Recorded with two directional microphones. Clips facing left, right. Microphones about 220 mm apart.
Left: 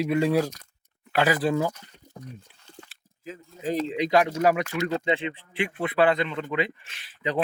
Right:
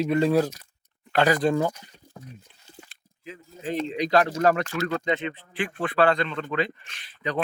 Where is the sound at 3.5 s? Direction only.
Centre (ahead or behind).